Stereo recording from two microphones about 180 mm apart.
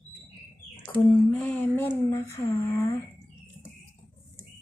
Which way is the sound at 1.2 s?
10° left (ahead or behind).